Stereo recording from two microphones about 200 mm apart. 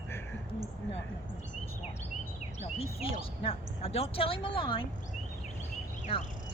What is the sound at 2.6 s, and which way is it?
A woman's voice, 30° left (ahead or behind).